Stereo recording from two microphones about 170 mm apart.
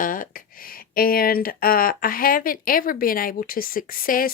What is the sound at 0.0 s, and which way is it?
Speech, 55° left (ahead or behind).